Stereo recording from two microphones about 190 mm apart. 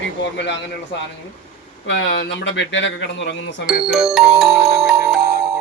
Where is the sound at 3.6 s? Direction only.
Centre (ahead or behind).